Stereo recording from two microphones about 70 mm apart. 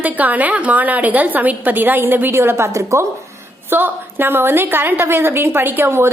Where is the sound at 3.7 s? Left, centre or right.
Right.